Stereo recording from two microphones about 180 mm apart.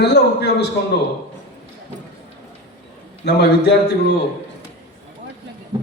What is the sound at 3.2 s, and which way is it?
Speech, 65° left (ahead or behind).